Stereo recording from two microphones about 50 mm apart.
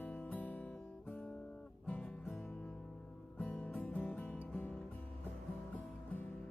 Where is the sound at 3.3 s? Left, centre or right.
Left.